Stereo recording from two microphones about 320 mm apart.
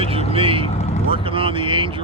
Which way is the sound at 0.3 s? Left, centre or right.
Centre.